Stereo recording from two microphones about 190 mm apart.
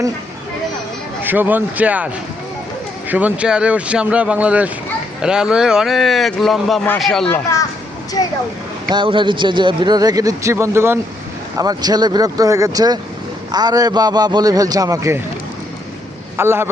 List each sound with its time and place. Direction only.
1.2 s speech: 10° right (ahead or behind)
3.1 s speech: 10° right (ahead or behind)
8.9 s speech: 25° right (ahead or behind)
16.4 s speech: 10° right (ahead or behind)